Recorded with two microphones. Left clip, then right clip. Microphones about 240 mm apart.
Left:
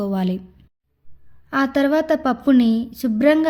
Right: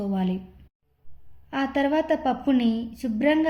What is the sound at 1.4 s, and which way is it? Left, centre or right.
A woman's voice, left.